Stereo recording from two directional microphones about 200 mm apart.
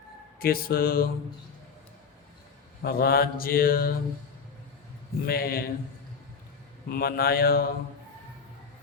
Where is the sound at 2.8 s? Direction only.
50° left (ahead or behind).